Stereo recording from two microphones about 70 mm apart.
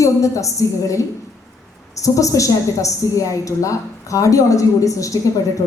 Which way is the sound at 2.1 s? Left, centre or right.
Left.